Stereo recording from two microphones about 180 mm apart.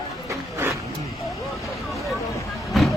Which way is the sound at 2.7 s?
Centre (ahead or behind).